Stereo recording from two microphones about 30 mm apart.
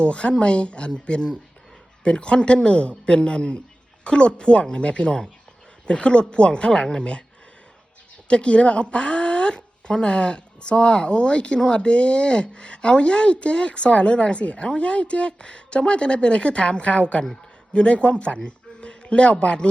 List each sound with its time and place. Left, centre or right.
0.0 s speech: left
7.0 s speech: left
8.3 s speech: left
18.3 s a sound: left
19.0 s speech: left